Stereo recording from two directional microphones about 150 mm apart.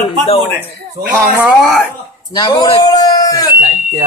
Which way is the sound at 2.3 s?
25° left (ahead or behind).